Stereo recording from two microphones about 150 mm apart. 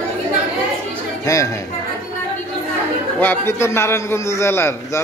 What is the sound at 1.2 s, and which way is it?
Speech, 20° left (ahead or behind).